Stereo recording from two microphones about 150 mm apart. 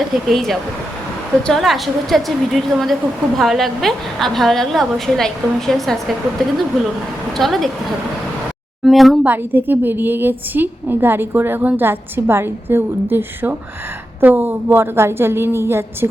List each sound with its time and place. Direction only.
0.3 s a woman's voice: centre (ahead or behind)
7.3 s a woman's voice: centre (ahead or behind)
8.8 s a woman's voice: centre (ahead or behind)
9.2 s a woman's voice: 15° right (ahead or behind)